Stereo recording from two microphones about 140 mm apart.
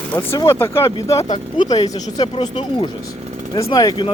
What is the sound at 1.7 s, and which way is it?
Speech, 35° left (ahead or behind).